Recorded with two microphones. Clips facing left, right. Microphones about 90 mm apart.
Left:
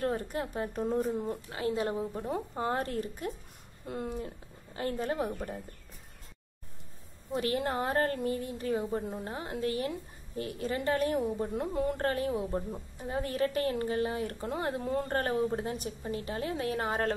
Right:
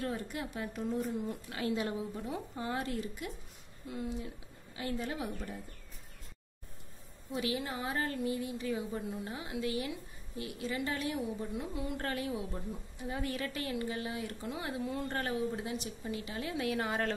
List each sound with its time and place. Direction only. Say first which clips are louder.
0.0 s a woman's voice: left 5 dB; 40° left (ahead or behind)
7.3 s speech: left 5 dB; 50° left (ahead or behind)